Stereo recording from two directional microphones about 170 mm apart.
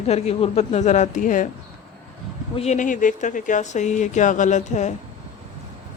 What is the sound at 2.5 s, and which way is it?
Speech, 40° left (ahead or behind).